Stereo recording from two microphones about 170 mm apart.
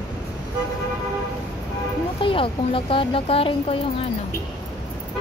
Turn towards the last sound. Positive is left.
turn(degrees=35)  # may be behind; listen again after turning